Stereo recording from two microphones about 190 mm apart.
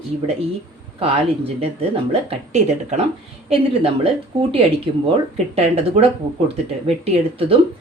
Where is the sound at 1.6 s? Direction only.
30° right (ahead or behind).